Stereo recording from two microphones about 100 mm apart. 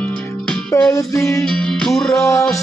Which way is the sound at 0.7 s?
30° left (ahead or behind).